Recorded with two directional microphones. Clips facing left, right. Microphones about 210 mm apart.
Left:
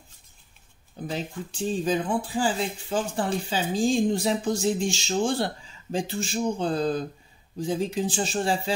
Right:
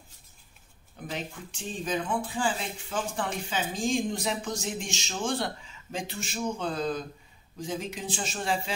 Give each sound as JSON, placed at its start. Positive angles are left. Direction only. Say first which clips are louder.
{"t": 1.1, "sound": "speech", "louder": "left 4 dB", "side_deg": 35}